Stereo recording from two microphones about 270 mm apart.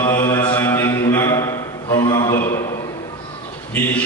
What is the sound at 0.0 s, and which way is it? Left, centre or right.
Mantra, centre.